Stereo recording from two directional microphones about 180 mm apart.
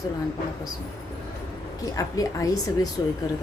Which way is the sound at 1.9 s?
20° left (ahead or behind).